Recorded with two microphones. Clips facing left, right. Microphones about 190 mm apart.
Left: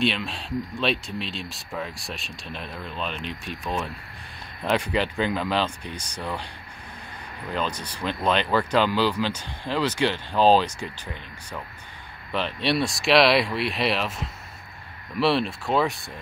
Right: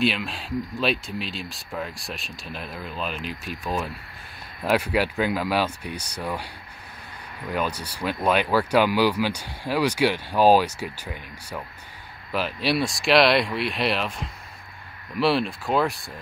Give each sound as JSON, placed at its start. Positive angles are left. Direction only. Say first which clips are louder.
{"t": 0.0, "sound": "speech", "louder": "right 1 dB", "side_deg": 0}
{"t": 7.5, "sound": "speech", "louder": "right 1 dB", "side_deg": -10}